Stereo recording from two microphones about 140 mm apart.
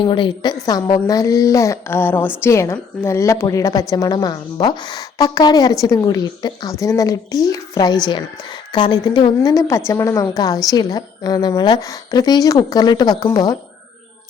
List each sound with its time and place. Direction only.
0.0 s a woman's voice: 35° left (ahead or behind)